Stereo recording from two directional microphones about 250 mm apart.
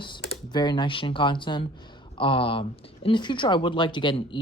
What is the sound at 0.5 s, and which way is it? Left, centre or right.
Speech, centre.